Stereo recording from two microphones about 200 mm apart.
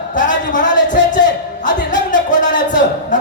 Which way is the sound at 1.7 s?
40° left (ahead or behind).